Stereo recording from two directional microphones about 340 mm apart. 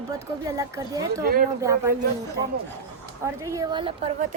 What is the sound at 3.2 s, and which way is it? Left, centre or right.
Speech, centre.